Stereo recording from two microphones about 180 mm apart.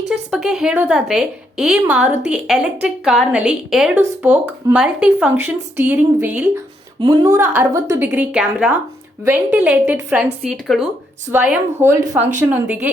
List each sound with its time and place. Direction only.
0.1 s a woman's voice: 5° right (ahead or behind)
7.0 s a woman's voice: 25° right (ahead or behind)
7.3 s a woman's voice: 15° right (ahead or behind)